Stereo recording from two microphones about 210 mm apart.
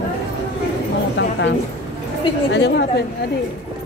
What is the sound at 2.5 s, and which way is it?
Speech, 55° left (ahead or behind).